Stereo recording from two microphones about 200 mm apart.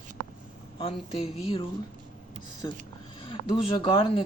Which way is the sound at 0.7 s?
30° left (ahead or behind).